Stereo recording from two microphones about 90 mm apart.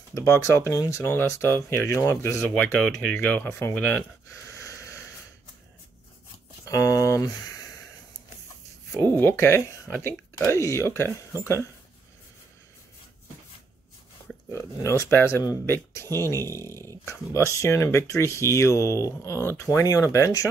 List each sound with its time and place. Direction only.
0.1 s speech: 30° left (ahead or behind)
2.5 s speech: 10° left (ahead or behind)
3.4 s speech: 30° left (ahead or behind)
3.7 s speech: 20° left (ahead or behind)
6.6 s music: 35° left (ahead or behind)
9.1 s speech: 25° left (ahead or behind)
14.5 s speech: 35° left (ahead or behind)
15.0 s speech: 25° left (ahead or behind)
16.3 s speech: 40° right (ahead or behind)
16.6 s speech: 30° left (ahead or behind)